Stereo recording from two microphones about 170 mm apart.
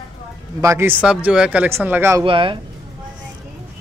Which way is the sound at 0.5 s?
15° right (ahead or behind).